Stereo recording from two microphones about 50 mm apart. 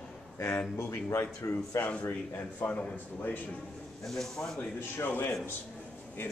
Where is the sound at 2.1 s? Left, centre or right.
Left.